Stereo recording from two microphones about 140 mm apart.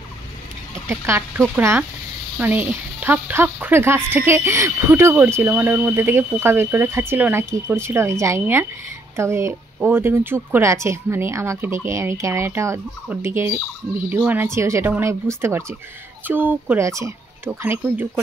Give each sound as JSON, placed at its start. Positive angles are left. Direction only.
{"t": 0.8, "sound": "speech", "side_deg": -15}